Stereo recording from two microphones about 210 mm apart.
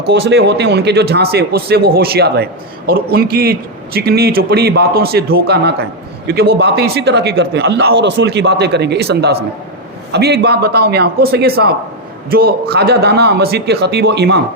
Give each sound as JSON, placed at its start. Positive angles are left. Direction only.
{"t": 0.1, "sound": "speech", "side_deg": -55}